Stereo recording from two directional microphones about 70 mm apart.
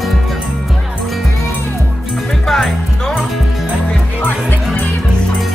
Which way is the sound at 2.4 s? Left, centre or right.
Centre.